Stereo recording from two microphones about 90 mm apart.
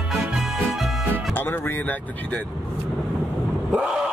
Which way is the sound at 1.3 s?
25° left (ahead or behind).